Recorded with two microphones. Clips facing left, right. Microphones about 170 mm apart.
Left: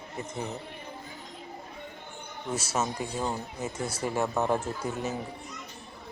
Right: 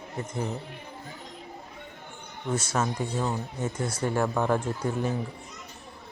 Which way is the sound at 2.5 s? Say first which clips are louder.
Right 2 dB; 10° left (ahead or behind).